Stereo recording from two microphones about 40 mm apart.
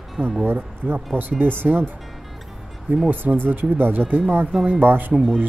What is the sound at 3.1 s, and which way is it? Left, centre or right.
Speech, right.